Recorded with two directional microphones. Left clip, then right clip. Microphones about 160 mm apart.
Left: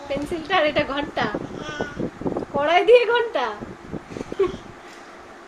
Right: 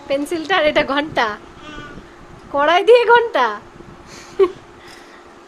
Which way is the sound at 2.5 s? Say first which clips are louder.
Right 4 dB; 55° right (ahead or behind).